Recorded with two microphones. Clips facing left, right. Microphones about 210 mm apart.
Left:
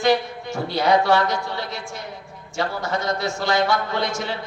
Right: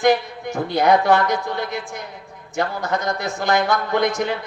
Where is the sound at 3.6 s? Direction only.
50° right (ahead or behind).